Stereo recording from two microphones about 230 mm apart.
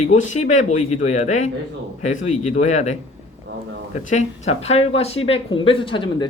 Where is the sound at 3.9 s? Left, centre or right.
Left.